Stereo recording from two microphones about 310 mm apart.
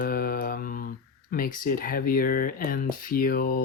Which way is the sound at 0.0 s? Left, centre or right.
Left.